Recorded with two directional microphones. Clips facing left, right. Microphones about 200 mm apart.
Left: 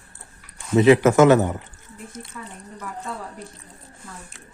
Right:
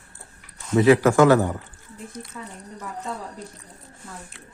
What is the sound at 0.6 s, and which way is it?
Speech, 20° left (ahead or behind).